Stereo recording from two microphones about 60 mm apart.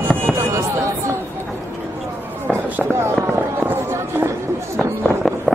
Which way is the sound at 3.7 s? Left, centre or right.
Right.